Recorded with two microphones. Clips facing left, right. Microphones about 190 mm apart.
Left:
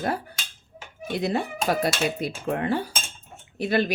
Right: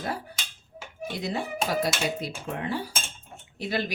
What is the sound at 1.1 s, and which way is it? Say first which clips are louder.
Speech: left 4 dB; 60° left (ahead or behind).